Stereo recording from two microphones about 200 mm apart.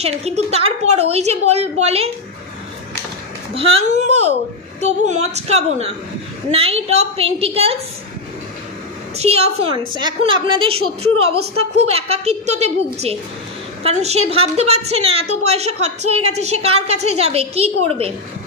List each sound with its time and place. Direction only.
0.0 s a woman's voice: 30° right (ahead or behind)
3.5 s a woman's voice: 30° right (ahead or behind)
9.1 s a woman's voice: 30° right (ahead or behind)
11.8 s a woman's voice: 30° right (ahead or behind)